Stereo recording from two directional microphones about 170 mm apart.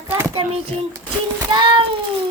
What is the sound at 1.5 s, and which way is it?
Speech, 30° right (ahead or behind).